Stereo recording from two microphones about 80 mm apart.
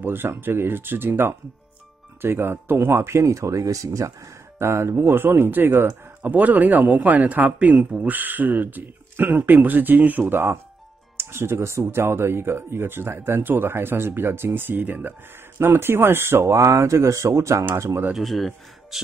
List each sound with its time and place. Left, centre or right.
0.0 s speech: right
18.1 s speech: centre